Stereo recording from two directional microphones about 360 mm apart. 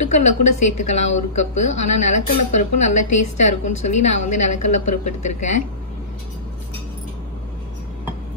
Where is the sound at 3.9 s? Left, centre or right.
Left.